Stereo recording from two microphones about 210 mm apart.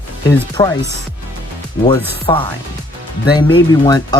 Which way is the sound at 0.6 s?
20° left (ahead or behind).